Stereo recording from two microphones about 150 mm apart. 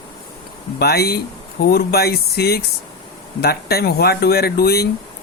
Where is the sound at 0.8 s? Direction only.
90° left.